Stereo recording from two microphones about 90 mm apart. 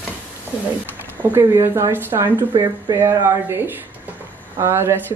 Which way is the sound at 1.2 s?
25° right (ahead or behind).